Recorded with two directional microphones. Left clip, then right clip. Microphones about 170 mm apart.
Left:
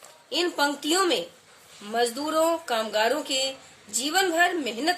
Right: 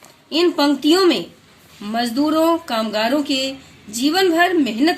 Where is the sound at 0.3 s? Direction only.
40° right (ahead or behind).